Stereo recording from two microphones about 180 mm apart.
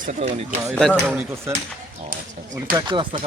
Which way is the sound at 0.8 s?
Centre (ahead or behind).